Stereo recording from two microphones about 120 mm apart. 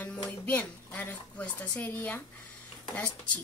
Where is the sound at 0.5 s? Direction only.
15° left (ahead or behind).